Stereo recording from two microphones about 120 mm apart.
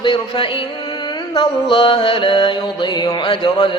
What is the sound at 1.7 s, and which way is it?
Mantra, 45° left (ahead or behind).